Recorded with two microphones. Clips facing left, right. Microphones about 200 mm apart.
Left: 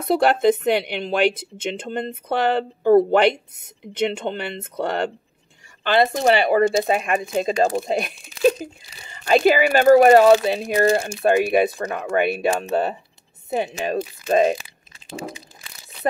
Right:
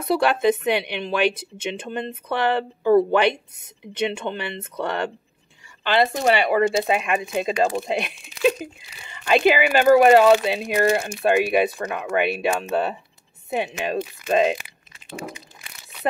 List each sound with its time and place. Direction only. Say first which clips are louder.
0.1 s speech: left 2 dB; 50° left (ahead or behind)
4.4 s speech: left 2 dB; 50° left (ahead or behind); by 11.1 s 30° left (ahead or behind)
11.4 s speech: left 2 dB; 45° left (ahead or behind)